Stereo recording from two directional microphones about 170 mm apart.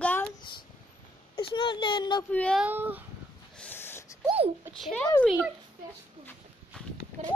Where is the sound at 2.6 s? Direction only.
10° right (ahead or behind).